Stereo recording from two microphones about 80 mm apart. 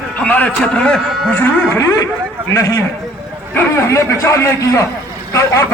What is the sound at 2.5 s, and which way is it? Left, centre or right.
Speech, left.